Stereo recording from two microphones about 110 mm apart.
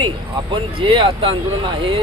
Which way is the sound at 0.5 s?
50° right (ahead or behind).